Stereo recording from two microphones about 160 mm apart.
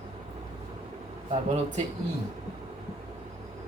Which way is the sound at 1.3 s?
40° right (ahead or behind).